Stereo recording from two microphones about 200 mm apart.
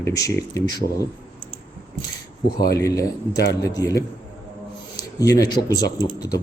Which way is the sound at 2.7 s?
15° left (ahead or behind).